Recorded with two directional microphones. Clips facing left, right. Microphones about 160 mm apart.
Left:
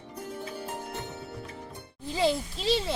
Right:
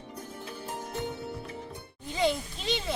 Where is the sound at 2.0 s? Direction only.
35° left (ahead or behind).